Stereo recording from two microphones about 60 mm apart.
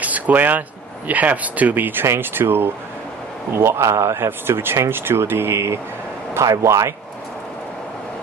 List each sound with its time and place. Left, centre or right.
0.0 s a sound: right
1.0 s speech: right
4.3 s speech: right